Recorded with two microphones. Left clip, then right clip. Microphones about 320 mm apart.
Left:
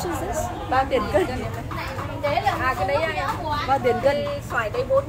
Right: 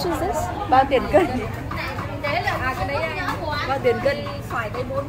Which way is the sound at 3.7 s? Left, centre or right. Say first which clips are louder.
Left 1 dB; centre.